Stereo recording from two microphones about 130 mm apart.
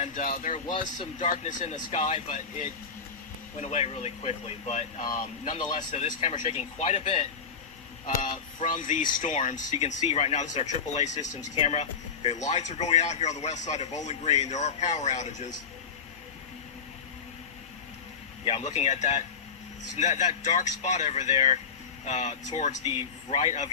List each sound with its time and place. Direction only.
0.0 s speech: 85° left; by 2.7 s 70° left (ahead or behind)
3.6 s speech: 55° left (ahead or behind)
8.0 s speech: 80° left
9.8 s speech: 55° left (ahead or behind)
18.4 s speech: 55° left (ahead or behind)
23.3 s a man's voice: 55° left (ahead or behind)